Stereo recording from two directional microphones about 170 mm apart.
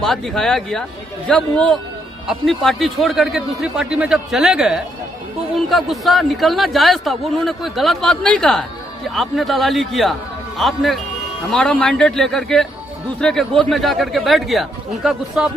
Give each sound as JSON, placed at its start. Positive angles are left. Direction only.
{"t": 0.0, "sound": "a man's voice", "side_deg": 0}